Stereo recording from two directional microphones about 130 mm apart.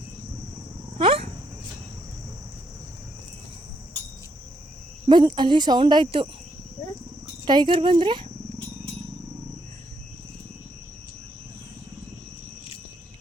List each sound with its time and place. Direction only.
0.9 s dog: 45° right (ahead or behind)
5.0 s speech: 35° right (ahead or behind)
7.4 s speech: 35° right (ahead or behind)